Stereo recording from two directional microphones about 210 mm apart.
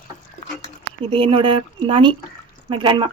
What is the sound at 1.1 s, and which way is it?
Speech, 25° right (ahead or behind).